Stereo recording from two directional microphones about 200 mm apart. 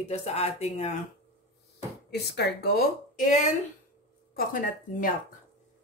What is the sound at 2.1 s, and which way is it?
Speech, 55° left (ahead or behind).